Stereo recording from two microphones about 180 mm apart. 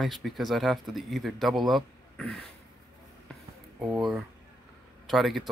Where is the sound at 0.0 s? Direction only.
Centre (ahead or behind).